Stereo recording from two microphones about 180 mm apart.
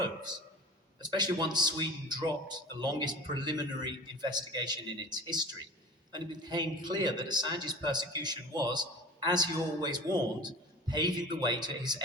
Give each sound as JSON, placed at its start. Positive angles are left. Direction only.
{"t": 1.0, "sound": "a man's voice", "side_deg": -25}